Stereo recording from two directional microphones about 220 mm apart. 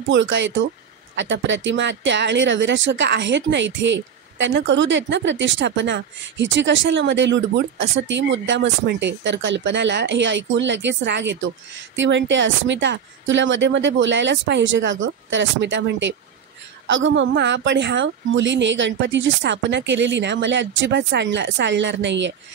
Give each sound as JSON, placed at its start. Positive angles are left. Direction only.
{"t": 0.1, "sound": "speech", "side_deg": -55}